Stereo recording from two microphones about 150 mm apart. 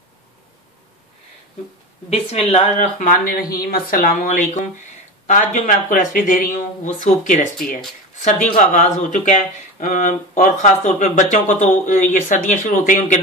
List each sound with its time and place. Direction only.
2.0 s speech: 45° left (ahead or behind)